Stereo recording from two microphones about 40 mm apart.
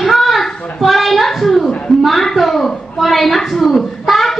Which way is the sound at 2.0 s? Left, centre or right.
Centre.